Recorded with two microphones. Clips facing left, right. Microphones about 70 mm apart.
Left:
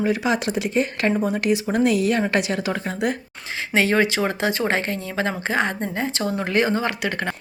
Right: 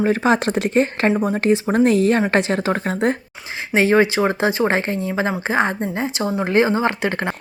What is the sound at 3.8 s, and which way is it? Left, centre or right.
A woman's voice, right.